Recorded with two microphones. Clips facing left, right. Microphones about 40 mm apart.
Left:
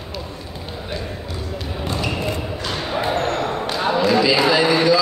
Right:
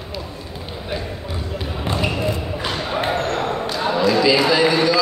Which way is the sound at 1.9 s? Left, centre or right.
Centre.